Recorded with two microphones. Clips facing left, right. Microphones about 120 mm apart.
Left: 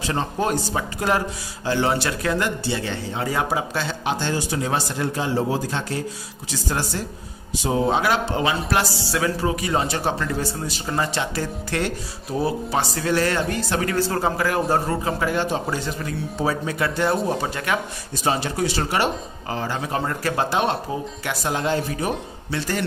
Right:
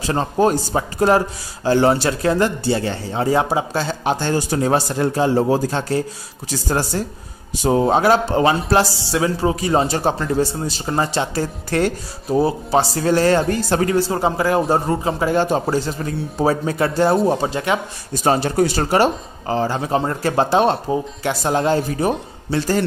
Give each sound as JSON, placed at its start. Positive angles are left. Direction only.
{"t": 0.0, "sound": "speech", "side_deg": -35}
{"t": 13.9, "sound": "a man's voice", "side_deg": -15}
{"t": 15.4, "sound": "speech", "side_deg": -45}
{"t": 18.2, "sound": "speech", "side_deg": -45}